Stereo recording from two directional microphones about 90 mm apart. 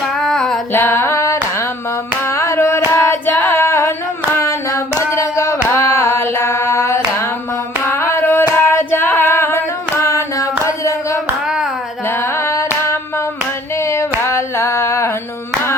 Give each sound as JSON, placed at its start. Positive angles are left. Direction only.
{"t": 0.2, "sound": "female singing", "side_deg": 5}
{"t": 0.7, "sound": "music", "side_deg": 25}
{"t": 2.2, "sound": "female singing", "side_deg": 30}
{"t": 5.7, "sound": "hands", "side_deg": 30}
{"t": 7.9, "sound": "singing", "side_deg": 30}
{"t": 11.4, "sound": "hands", "side_deg": -10}
{"t": 12.0, "sound": "a sound", "side_deg": 30}